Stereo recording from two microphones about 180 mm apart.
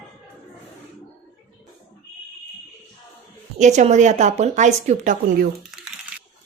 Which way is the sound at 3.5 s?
40° right (ahead or behind).